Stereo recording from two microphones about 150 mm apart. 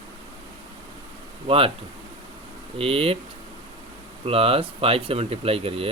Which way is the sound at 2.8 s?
40° right (ahead or behind).